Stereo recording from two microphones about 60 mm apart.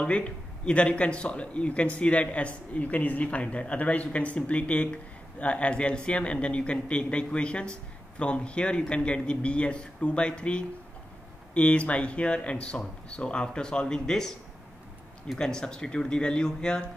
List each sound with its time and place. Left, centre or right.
0.0 s a man's voice: centre
15.3 s a man's voice: centre